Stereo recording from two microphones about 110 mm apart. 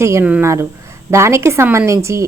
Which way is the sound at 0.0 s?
25° right (ahead or behind).